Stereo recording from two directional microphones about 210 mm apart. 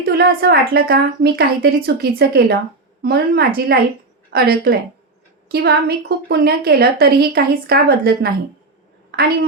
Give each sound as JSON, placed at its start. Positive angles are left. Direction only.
{"t": 0.0, "sound": "a woman's voice", "side_deg": -45}